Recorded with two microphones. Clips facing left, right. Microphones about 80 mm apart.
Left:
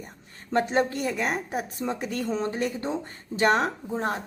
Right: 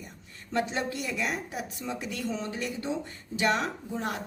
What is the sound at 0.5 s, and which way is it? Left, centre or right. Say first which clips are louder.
A woman's voice: left 6 dB; left.